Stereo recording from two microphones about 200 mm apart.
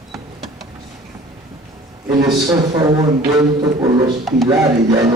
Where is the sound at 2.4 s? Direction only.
20° right (ahead or behind).